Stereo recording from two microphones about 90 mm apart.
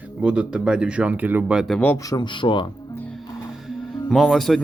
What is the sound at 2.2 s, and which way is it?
Speech, 65° left (ahead or behind).